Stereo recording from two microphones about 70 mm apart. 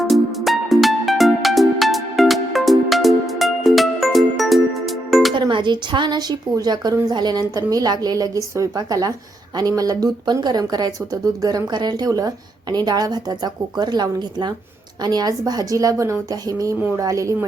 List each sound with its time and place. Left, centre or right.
0.0 s music: centre
5.4 s a woman's voice: right
8.7 s a woman's voice: right
12.7 s a woman's voice: right
15.0 s a woman's voice: right